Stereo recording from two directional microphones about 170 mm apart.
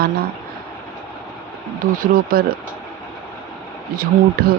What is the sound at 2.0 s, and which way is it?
Speech, 60° right (ahead or behind).